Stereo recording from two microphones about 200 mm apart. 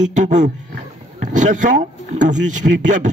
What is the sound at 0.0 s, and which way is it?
A man's voice, 35° right (ahead or behind).